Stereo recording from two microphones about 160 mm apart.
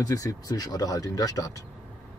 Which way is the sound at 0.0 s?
20° left (ahead or behind).